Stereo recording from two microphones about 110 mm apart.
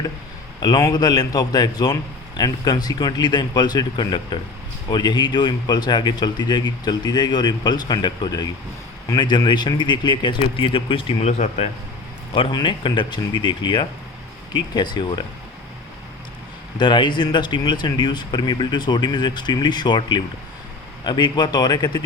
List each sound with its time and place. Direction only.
0.6 s a man's voice: 35° left (ahead or behind); by 11.7 s 70° left (ahead or behind)
12.3 s a man's voice: 45° left (ahead or behind)
16.7 s a man's voice: 45° left (ahead or behind)